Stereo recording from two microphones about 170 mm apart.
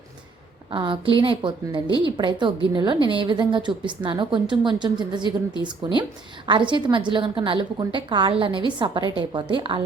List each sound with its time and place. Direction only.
0.7 s a woman's voice: 30° right (ahead or behind)